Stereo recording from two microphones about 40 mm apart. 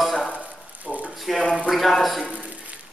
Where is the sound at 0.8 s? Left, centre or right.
Right.